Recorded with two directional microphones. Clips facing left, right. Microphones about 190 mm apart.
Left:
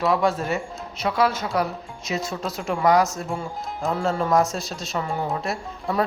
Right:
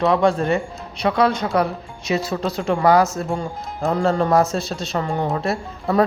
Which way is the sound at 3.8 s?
Centre (ahead or behind).